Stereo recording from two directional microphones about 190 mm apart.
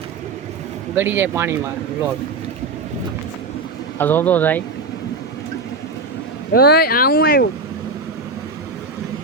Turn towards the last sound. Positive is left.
turn(degrees=55)  # may be behind; listen again after turning